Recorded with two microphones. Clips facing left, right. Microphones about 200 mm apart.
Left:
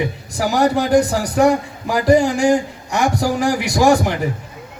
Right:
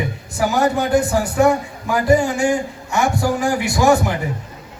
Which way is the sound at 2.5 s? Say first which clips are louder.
Left 3 dB; 35° left (ahead or behind).